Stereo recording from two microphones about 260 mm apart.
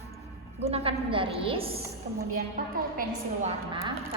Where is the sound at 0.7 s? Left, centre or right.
Right.